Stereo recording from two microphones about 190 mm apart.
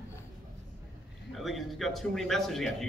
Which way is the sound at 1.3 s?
Centre (ahead or behind).